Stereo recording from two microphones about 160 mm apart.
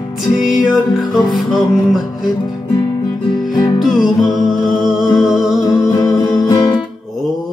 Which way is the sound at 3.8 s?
Centre (ahead or behind).